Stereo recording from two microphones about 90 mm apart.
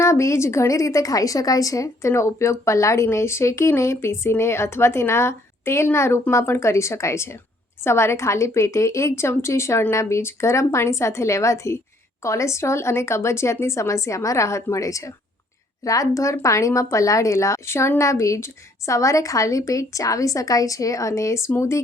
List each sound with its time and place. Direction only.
0.0 s a woman's voice: 35° left (ahead or behind)